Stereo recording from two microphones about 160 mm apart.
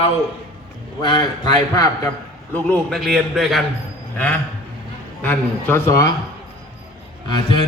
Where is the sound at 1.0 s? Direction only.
30° left (ahead or behind).